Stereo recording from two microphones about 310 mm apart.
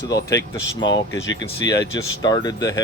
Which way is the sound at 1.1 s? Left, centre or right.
Left.